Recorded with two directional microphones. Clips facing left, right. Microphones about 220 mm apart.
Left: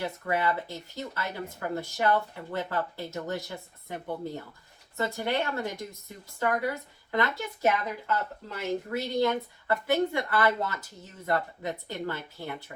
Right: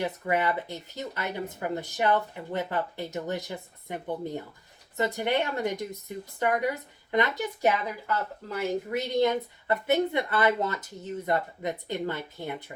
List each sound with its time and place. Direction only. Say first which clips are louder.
0.0 s speech: right 2 dB; 20° right (ahead or behind)